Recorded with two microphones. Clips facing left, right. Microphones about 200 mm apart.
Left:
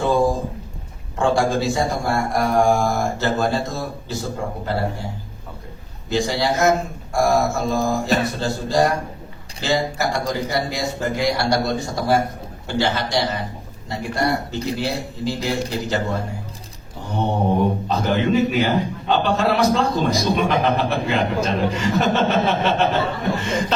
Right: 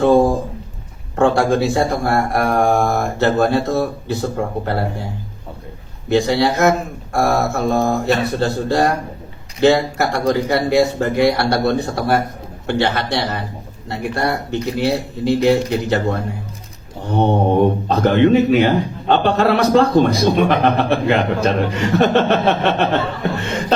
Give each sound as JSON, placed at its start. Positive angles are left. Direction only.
{"t": 0.0, "sound": "a sound", "side_deg": -60}
{"t": 1.1, "sound": "a man's voice", "side_deg": -60}
{"t": 6.1, "sound": "a man's voice", "side_deg": -60}
{"t": 17.0, "sound": "mantra", "side_deg": -60}
{"t": 17.8, "sound": "a man's voice", "side_deg": -60}